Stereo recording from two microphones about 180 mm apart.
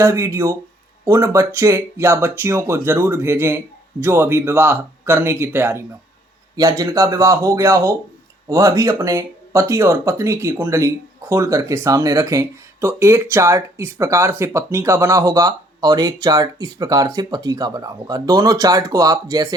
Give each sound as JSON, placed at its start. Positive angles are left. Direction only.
{"t": 0.0, "sound": "speech", "side_deg": -15}